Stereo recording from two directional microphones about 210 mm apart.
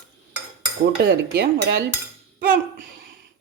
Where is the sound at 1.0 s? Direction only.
55° right (ahead or behind).